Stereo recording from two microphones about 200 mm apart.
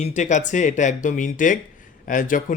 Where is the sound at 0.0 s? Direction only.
35° left (ahead or behind).